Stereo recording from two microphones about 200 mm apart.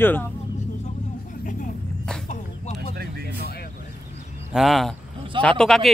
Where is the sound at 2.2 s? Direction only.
35° left (ahead or behind).